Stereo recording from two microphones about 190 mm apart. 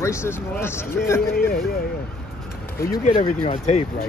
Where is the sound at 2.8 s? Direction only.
50° left (ahead or behind).